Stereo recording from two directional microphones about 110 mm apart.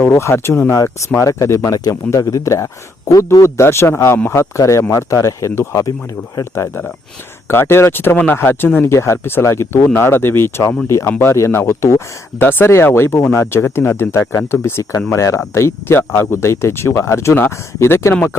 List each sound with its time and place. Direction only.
0.0 s speech: 25° left (ahead or behind)